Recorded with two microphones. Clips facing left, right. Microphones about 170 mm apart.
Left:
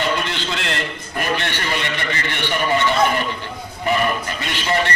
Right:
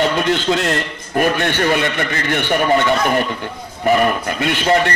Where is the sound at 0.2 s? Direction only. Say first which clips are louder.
Right 9 dB; 45° right (ahead or behind).